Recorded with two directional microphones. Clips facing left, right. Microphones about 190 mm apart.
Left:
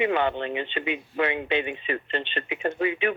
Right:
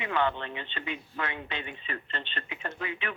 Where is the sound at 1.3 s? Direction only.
70° left (ahead or behind).